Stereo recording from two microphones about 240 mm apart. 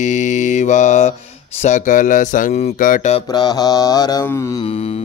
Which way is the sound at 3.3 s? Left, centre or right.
Centre.